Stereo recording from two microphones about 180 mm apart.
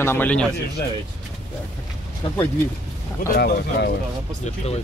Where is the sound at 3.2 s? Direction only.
55° left (ahead or behind).